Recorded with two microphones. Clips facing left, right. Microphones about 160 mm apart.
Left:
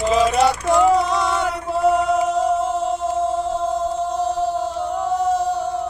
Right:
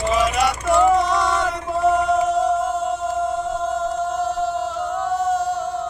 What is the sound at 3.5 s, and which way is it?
Music, 30° left (ahead or behind).